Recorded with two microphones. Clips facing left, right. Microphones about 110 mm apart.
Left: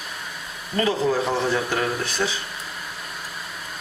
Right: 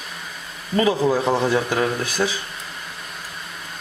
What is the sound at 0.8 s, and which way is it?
Speech, 15° right (ahead or behind).